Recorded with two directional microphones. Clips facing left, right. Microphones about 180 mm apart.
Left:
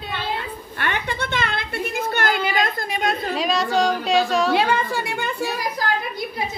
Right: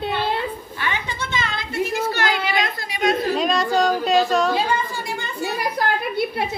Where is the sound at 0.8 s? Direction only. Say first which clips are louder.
Left 3 dB; 60° left (ahead or behind).